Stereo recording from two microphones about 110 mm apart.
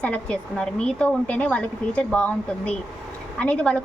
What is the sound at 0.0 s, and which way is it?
A woman's voice, 10° left (ahead or behind).